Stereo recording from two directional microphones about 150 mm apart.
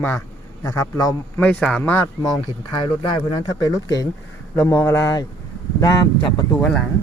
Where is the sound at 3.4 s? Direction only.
25° left (ahead or behind).